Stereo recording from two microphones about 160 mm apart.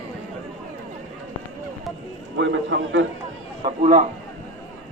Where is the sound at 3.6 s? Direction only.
55° right (ahead or behind).